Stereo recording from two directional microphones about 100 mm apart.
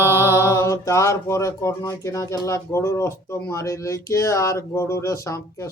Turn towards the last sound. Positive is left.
turn(degrees=30)  # may be behind; listen again after turning